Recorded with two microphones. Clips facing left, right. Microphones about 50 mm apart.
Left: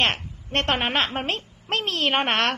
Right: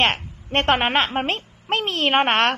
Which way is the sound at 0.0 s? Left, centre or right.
Right.